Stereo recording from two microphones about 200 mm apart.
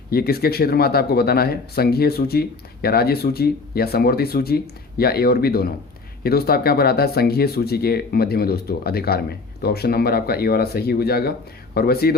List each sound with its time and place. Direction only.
0.1 s speech: 50° left (ahead or behind)